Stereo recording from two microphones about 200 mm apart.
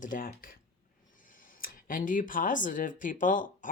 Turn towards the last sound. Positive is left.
turn(degrees=40)  # may be behind; listen again after turning